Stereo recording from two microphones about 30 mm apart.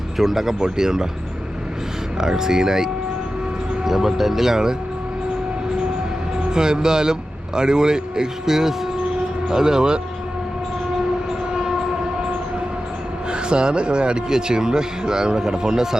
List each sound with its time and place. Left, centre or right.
0.2 s speech: centre
2.1 s a man's voice: centre
6.5 s a man's voice: right
13.3 s a man's voice: right